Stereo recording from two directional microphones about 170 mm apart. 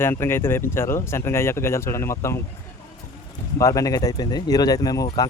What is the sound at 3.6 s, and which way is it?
Speech, 20° left (ahead or behind).